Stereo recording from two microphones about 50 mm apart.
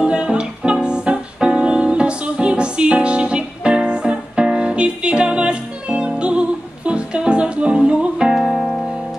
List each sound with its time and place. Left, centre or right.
0.0 s music: centre
8.3 s music: centre